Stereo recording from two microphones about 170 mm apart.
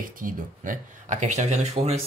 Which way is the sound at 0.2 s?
50° right (ahead or behind).